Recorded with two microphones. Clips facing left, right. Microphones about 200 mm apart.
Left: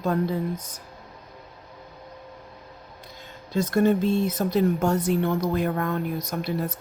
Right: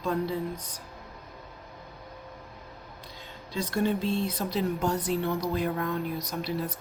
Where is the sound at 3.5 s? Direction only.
50° left (ahead or behind).